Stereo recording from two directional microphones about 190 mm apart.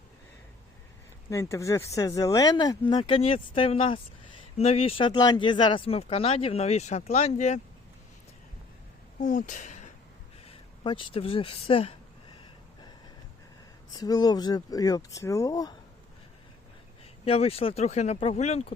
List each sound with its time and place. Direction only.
1.3 s speech: 15° left (ahead or behind); by 7.6 s 35° left (ahead or behind)
9.2 s speech: 45° left (ahead or behind)
10.4 s speech: 25° left (ahead or behind)
14.0 s speech: 20° left (ahead or behind)
17.2 s speech: 30° left (ahead or behind)